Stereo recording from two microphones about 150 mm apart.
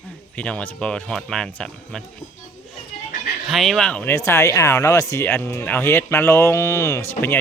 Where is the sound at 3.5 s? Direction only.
Centre (ahead or behind).